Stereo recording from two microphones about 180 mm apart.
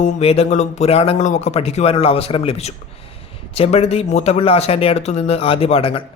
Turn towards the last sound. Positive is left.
turn(degrees=30)  # may be behind; listen again after turning